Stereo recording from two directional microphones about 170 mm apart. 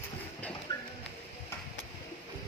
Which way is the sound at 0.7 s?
25° left (ahead or behind).